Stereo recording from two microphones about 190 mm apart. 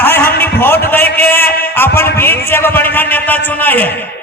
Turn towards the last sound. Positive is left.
turn(degrees=10)  # may be behind; listen again after turning